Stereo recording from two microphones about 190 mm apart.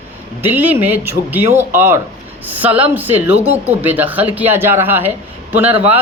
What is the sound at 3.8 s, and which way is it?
Speech, 10° right (ahead or behind).